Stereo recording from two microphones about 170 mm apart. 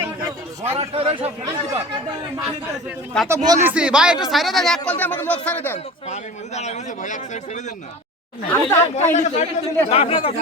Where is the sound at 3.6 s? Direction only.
5° right (ahead or behind); by 5.8 s 10° left (ahead or behind).